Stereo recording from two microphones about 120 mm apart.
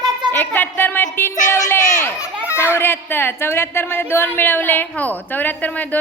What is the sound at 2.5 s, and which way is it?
Speech, 20° left (ahead or behind).